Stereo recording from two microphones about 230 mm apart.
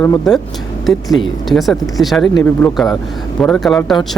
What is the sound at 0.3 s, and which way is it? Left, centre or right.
Speech, centre.